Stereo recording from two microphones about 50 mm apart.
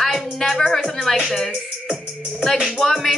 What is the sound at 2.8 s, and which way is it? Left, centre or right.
Music, centre.